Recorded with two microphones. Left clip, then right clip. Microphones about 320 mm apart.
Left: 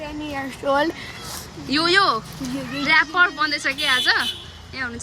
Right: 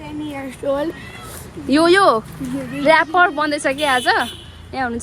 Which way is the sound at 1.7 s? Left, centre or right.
Centre.